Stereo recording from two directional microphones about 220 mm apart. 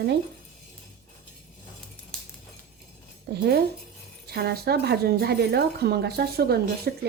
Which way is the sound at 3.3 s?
50° right (ahead or behind).